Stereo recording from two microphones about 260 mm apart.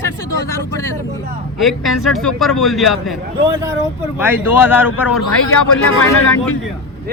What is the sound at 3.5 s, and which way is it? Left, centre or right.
Speech, centre.